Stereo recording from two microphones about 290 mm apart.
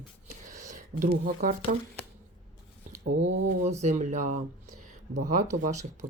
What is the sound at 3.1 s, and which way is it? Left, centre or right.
Speech, right.